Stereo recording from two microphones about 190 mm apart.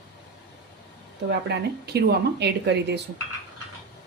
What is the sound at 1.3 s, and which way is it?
Speech, 60° right (ahead or behind).